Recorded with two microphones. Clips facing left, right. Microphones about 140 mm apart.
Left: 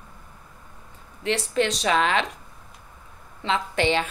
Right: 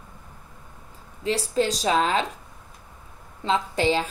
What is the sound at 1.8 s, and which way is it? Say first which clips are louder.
Speech: even; 75° left (ahead or behind).